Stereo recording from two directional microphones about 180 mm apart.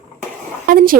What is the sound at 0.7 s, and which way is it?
Speech, 50° right (ahead or behind).